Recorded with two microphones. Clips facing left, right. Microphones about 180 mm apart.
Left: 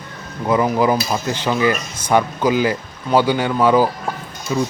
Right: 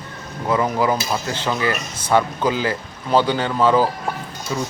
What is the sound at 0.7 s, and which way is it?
Speech, 15° left (ahead or behind).